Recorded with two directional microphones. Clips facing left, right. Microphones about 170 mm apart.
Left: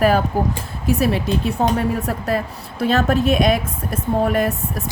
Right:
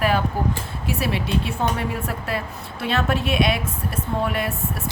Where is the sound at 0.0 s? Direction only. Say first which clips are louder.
Left 5 dB; 40° left (ahead or behind).